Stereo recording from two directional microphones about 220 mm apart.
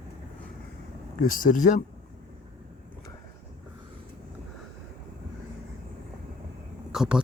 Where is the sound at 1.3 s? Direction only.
35° left (ahead or behind).